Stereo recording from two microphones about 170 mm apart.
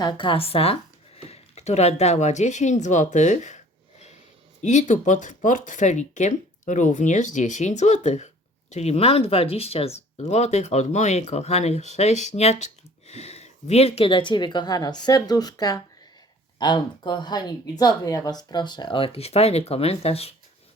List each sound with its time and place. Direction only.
0.0 s speech: 25° left (ahead or behind); by 3.6 s 45° left (ahead or behind)
4.6 s speech: 45° left (ahead or behind)